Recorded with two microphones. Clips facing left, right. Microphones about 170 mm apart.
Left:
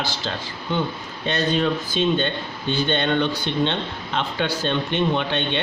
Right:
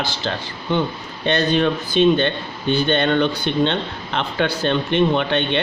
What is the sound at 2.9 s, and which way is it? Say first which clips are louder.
A man's voice: right 2 dB; 55° right (ahead or behind).